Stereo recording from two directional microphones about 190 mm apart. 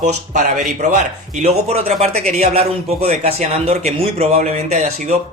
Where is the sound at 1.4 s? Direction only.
35° right (ahead or behind).